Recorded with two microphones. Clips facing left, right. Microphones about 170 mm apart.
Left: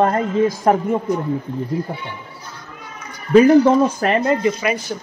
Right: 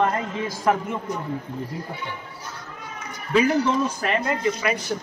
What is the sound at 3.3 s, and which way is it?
Speech, 45° left (ahead or behind).